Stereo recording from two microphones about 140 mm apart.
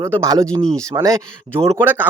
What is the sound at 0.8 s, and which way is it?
Speech, 25° right (ahead or behind).